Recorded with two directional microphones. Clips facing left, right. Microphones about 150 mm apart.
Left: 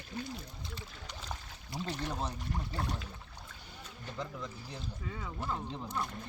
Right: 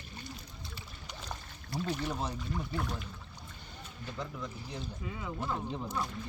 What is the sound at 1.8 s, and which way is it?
Speech, 10° right (ahead or behind).